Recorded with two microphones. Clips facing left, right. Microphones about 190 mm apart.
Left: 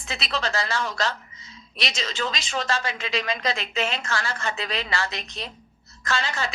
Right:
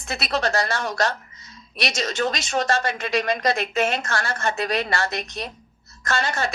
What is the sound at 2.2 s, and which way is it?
A woman's voice, 50° right (ahead or behind).